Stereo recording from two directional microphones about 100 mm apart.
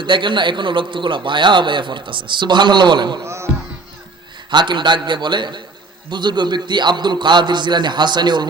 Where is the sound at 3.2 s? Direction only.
25° right (ahead or behind).